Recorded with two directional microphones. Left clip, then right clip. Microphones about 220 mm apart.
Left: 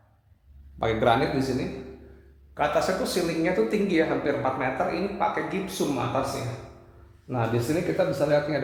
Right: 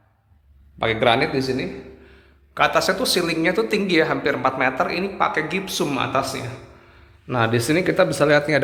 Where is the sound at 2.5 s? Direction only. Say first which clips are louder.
Right 6 dB; 25° right (ahead or behind).